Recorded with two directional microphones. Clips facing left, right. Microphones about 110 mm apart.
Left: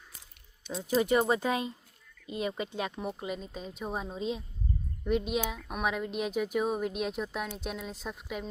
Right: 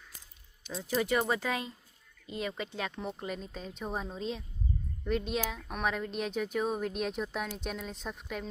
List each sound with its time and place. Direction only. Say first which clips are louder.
0.7 s speech: left 4 dB; 20° left (ahead or behind)